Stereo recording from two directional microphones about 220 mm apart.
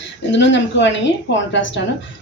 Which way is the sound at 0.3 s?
55° left (ahead or behind).